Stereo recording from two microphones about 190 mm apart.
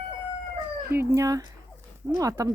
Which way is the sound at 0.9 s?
10° right (ahead or behind).